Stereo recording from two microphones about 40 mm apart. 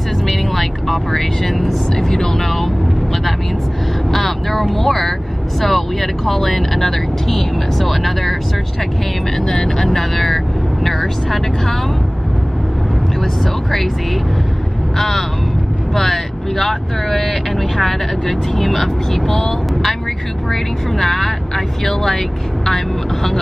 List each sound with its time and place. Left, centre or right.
0.3 s speech: centre
4.1 s speech: centre
9.4 s speech: left
9.8 s speech: centre
15.0 s speech: centre
20.9 s speech: centre